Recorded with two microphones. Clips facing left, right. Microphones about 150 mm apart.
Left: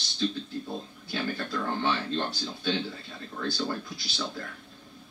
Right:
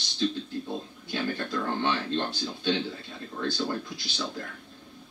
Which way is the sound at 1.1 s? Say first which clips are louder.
Right 1 dB; 15° right (ahead or behind).